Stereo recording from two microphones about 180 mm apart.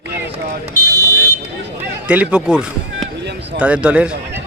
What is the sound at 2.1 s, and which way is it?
Speech, 5° right (ahead or behind).